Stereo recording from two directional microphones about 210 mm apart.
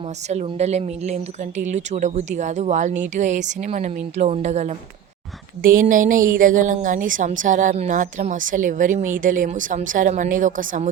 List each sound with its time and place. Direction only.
0.3 s a woman's voice: 30° right (ahead or behind)